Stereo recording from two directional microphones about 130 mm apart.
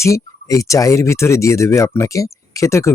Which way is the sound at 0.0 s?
25° left (ahead or behind).